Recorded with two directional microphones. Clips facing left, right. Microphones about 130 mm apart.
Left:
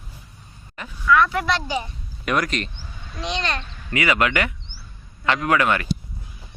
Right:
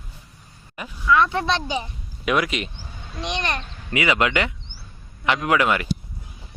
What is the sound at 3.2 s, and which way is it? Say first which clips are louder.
Speech: even; 20° right (ahead or behind).